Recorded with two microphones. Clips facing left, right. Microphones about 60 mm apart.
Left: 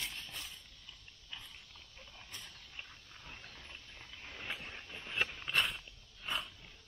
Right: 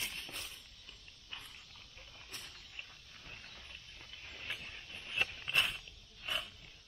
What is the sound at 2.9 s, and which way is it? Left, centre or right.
Pig, centre.